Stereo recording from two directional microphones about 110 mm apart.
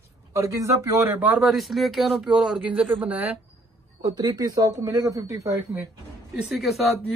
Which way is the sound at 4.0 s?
40° right (ahead or behind).